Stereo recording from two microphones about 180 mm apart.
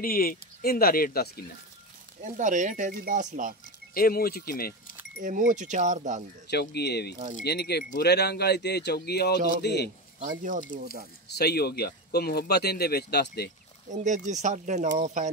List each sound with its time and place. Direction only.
0.0 s speech: 55° left (ahead or behind)
2.3 s speech: 45° right (ahead or behind)
3.9 s speech: 55° left (ahead or behind)
5.2 s speech: 45° right (ahead or behind)
6.5 s a man's voice: 65° left (ahead or behind)
10.4 s speech: 45° right (ahead or behind)
11.2 s speech: 65° left (ahead or behind)
13.8 s speech: 45° right (ahead or behind)